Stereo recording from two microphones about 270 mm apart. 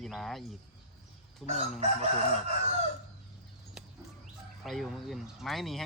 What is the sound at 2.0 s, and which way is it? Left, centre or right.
Chicken, right.